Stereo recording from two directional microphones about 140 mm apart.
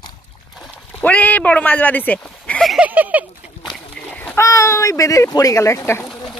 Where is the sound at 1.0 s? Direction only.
10° left (ahead or behind).